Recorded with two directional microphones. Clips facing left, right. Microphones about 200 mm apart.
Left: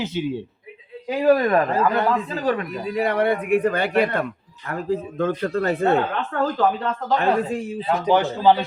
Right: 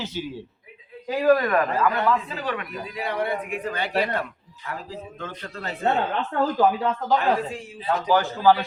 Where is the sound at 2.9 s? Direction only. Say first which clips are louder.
Left 6 dB; 60° left (ahead or behind).